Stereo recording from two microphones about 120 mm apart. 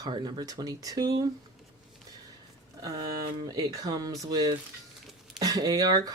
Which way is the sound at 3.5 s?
30° right (ahead or behind).